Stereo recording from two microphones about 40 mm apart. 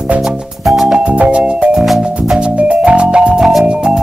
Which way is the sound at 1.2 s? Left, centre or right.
Right.